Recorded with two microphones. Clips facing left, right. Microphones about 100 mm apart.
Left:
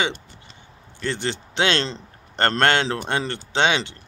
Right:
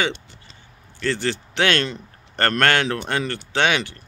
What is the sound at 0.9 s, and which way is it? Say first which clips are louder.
A man's voice: right 3 dB; 20° left (ahead or behind).